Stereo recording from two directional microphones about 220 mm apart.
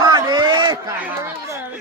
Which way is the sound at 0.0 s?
20° right (ahead or behind).